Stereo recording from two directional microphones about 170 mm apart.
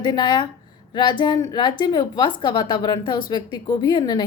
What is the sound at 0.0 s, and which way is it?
A woman's voice, 25° left (ahead or behind).